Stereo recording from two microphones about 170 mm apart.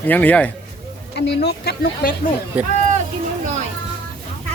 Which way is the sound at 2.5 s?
10° right (ahead or behind).